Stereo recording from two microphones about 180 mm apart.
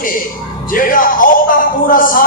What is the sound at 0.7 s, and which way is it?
A man's voice, 50° left (ahead or behind).